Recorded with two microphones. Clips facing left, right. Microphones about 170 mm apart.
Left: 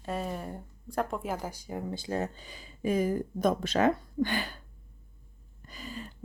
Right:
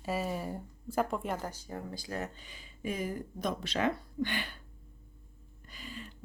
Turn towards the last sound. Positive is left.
turn(degrees=40)  # may be behind; listen again after turning